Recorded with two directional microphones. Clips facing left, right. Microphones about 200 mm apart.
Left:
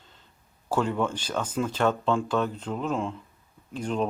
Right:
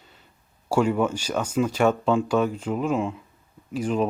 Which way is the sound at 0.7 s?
10° right (ahead or behind).